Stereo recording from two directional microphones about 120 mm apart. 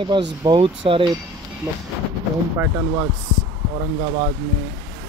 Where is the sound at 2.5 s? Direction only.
15° right (ahead or behind).